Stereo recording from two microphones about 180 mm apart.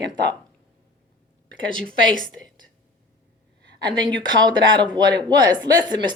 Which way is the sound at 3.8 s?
25° right (ahead or behind).